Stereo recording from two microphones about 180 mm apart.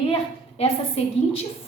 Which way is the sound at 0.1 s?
35° left (ahead or behind).